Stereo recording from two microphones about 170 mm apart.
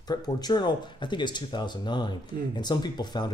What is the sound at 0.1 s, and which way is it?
Speech, 25° left (ahead or behind).